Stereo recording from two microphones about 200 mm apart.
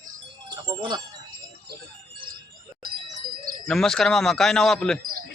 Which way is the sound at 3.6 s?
5° left (ahead or behind).